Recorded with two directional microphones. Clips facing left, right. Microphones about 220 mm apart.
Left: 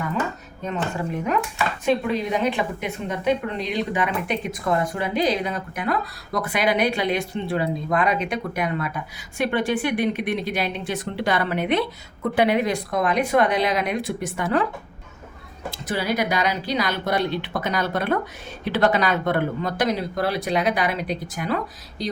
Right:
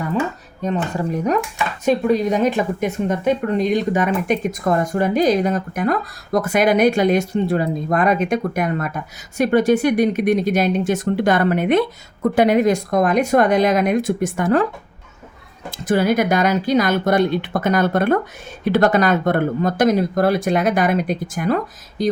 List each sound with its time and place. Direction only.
0.6 s speech: 40° right (ahead or behind)
15.9 s speech: 50° right (ahead or behind)